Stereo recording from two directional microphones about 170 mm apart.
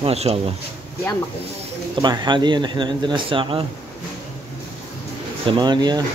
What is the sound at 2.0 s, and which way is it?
Speech, 25° right (ahead or behind).